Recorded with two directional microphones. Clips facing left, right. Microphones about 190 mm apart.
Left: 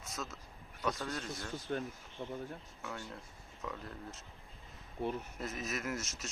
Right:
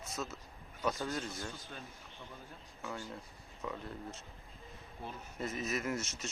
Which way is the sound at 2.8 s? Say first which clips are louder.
Right 3 dB; centre (ahead or behind).